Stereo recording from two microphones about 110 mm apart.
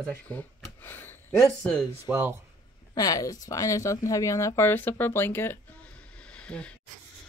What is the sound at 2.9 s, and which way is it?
Speech, 35° left (ahead or behind).